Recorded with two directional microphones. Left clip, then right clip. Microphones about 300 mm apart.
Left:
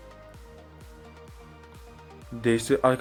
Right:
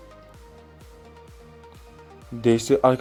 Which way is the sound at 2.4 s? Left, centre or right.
Centre.